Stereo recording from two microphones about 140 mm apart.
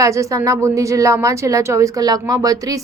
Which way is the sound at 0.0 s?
20° right (ahead or behind).